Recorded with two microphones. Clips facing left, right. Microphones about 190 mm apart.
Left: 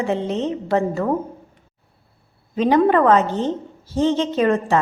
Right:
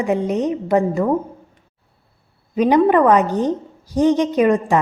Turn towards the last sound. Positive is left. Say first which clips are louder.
# right 2 dB
turn(degrees=-15)  # may be behind; listen again after turning